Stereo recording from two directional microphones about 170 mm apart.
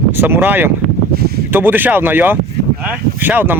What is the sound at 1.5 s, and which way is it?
Speech, 10° right (ahead or behind).